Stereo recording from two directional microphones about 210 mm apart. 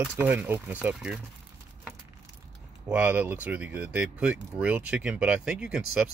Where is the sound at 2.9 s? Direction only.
10° right (ahead or behind).